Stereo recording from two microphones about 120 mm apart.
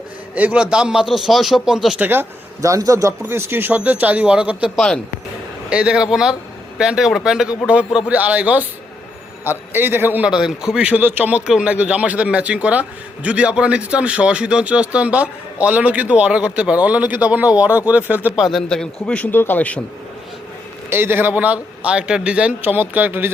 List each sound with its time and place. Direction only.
0.3 s a man's voice: 10° right (ahead or behind)
2.0 s a man's voice: 15° right (ahead or behind)
18.3 s a man's voice: centre (ahead or behind)
20.9 s speech: 20° right (ahead or behind)